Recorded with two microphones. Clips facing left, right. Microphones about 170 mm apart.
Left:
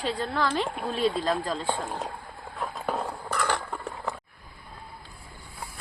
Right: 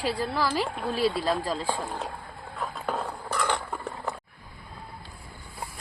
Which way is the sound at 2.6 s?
5° left (ahead or behind).